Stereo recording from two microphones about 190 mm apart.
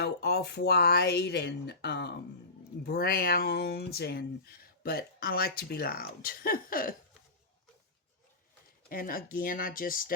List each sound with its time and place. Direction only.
0.0 s speech: 55° left (ahead or behind)
8.9 s speech: 50° left (ahead or behind)